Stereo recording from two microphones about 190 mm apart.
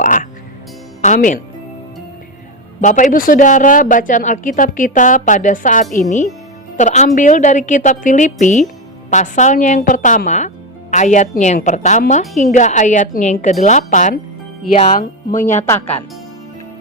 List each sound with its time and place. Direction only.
0.0 s frog: 45° left (ahead or behind)
1.0 s speech: 40° left (ahead or behind)
2.8 s a woman's voice: 45° left (ahead or behind)